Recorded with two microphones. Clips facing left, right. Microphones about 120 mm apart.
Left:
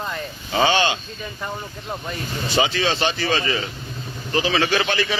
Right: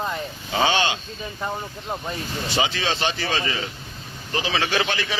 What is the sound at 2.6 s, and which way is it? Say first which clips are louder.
Speech: left 3 dB; 5° right (ahead or behind).